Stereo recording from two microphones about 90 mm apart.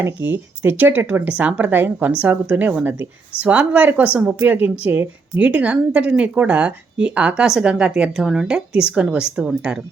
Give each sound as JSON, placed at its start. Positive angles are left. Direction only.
{"t": 0.0, "sound": "speech", "side_deg": -25}